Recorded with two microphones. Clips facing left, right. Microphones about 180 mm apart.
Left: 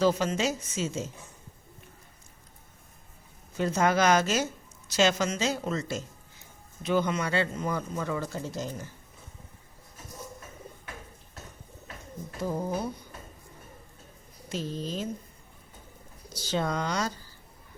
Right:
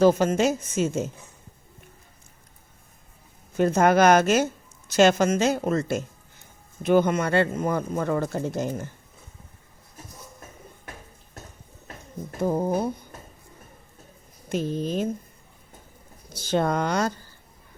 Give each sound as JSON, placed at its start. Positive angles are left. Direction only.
{"t": 0.0, "sound": "speech", "side_deg": -50}
{"t": 3.6, "sound": "speech", "side_deg": -55}
{"t": 12.4, "sound": "a sound", "side_deg": -50}
{"t": 14.5, "sound": "speech", "side_deg": -55}
{"t": 16.3, "sound": "speech", "side_deg": -55}